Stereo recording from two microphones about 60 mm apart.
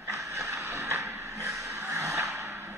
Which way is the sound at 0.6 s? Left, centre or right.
Right.